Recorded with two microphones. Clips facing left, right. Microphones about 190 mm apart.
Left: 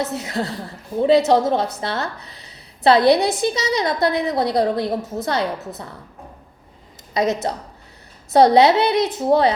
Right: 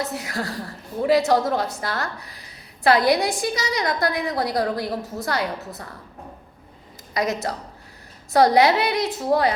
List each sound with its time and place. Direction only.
0.0 s a woman's voice: 20° left (ahead or behind)
7.1 s a woman's voice: 20° left (ahead or behind)